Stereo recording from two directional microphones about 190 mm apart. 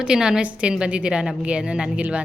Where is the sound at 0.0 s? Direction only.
5° right (ahead or behind).